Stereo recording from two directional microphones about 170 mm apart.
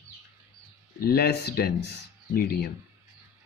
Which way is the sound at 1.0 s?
65° left (ahead or behind).